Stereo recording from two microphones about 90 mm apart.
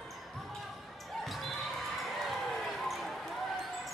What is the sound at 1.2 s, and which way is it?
Basketball bounce, centre (ahead or behind).